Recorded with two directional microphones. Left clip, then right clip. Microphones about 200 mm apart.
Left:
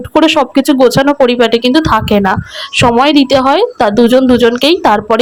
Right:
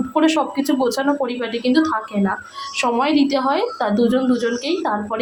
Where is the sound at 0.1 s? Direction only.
30° left (ahead or behind).